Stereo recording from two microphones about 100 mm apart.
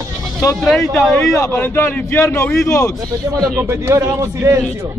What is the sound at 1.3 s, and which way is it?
A man's voice, 20° left (ahead or behind).